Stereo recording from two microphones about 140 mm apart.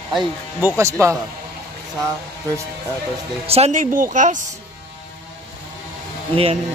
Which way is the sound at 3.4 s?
45° right (ahead or behind).